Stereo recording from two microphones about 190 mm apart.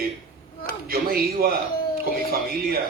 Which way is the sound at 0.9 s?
50° right (ahead or behind).